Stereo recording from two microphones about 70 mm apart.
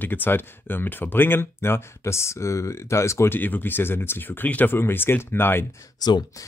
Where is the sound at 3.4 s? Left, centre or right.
Left.